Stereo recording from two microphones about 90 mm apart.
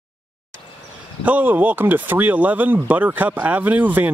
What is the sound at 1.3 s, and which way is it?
Speech, 20° right (ahead or behind).